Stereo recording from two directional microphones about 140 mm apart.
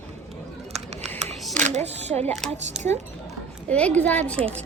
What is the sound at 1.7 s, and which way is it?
Speech, 55° right (ahead or behind).